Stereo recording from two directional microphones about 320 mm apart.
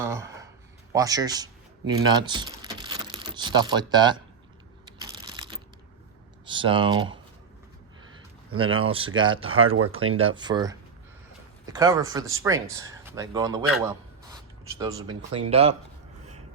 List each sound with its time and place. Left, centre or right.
0.0 s speech: centre
4.9 s a sound: centre
6.4 s speech: centre
8.5 s speech: centre
9.7 s speech: right
10.3 s speech: centre
14.8 s speech: centre